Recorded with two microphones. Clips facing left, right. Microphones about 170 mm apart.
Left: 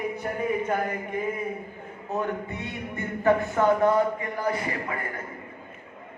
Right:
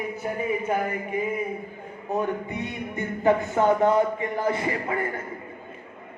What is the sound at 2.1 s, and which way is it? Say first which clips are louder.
Music: right 2 dB; 15° right (ahead or behind).